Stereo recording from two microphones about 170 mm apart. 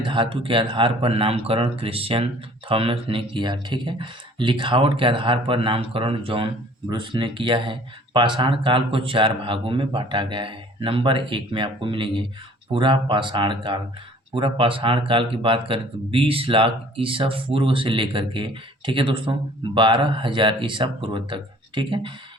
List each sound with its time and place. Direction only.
0.0 s speech: 30° right (ahead or behind)